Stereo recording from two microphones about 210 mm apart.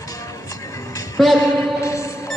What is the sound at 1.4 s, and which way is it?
Music, 15° left (ahead or behind).